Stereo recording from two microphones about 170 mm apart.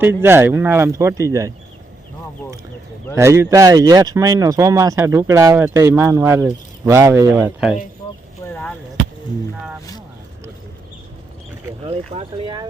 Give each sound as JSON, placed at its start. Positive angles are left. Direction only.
{"t": 0.0, "sound": "speech", "side_deg": -15}
{"t": 3.2, "sound": "speech", "side_deg": -15}
{"t": 8.4, "sound": "chop", "side_deg": 15}
{"t": 11.9, "sound": "speech", "side_deg": -40}